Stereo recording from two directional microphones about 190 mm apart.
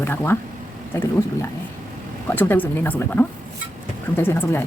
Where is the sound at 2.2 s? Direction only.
10° left (ahead or behind).